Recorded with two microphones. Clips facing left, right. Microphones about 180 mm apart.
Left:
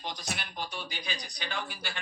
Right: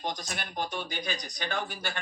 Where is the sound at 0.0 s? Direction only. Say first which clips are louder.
Right 3 dB; 45° right (ahead or behind).